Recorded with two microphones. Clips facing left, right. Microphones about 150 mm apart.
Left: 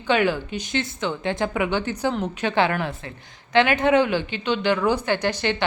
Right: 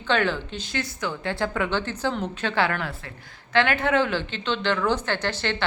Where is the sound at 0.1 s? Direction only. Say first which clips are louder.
Left 3 dB; 10° left (ahead or behind).